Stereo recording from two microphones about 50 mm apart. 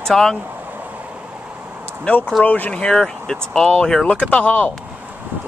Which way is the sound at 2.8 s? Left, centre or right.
Centre.